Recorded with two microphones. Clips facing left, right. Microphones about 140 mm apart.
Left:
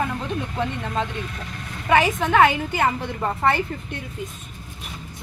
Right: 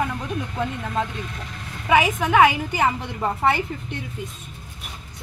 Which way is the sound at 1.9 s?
10° right (ahead or behind).